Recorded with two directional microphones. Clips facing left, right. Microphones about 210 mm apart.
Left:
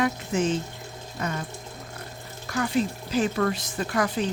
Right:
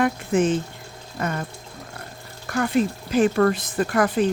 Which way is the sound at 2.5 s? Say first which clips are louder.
Right 4 dB; 55° right (ahead or behind).